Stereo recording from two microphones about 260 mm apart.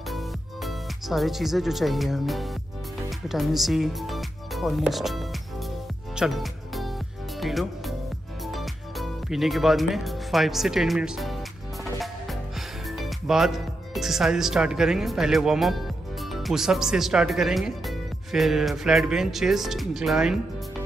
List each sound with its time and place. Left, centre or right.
0.7 s speech: centre
6.1 s music: centre
7.3 s speech: centre
11.8 s music: centre
12.9 s speech: centre